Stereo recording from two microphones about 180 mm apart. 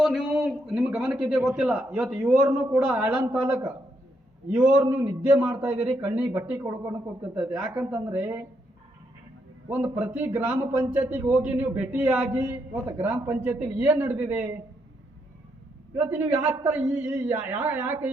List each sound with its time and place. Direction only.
0.0 s a man's voice: centre (ahead or behind)
4.4 s a man's voice: 5° right (ahead or behind)
7.9 s a man's voice: 20° right (ahead or behind)
9.6 s a man's voice: 10° right (ahead or behind)
16.0 s a man's voice: 10° right (ahead or behind)